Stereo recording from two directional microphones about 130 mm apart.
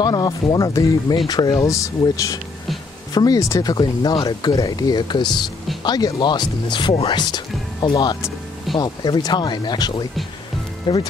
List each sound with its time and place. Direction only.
0.0 s speech: 30° left (ahead or behind)